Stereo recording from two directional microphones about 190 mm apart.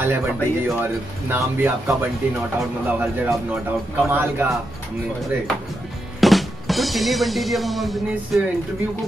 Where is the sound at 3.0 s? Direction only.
Centre (ahead or behind).